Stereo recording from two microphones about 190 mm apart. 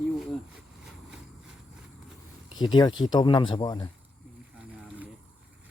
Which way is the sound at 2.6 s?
25° left (ahead or behind).